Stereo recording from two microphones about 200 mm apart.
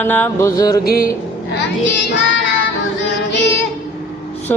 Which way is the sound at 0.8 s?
45° left (ahead or behind).